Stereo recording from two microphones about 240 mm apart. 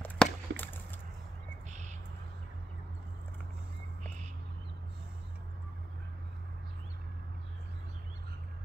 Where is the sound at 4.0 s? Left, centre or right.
Right.